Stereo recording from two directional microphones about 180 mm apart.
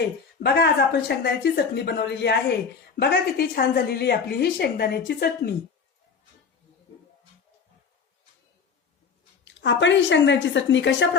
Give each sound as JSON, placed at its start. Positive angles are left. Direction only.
{"t": 0.3, "sound": "a woman's voice", "side_deg": 65}
{"t": 9.4, "sound": "a woman's voice", "side_deg": 85}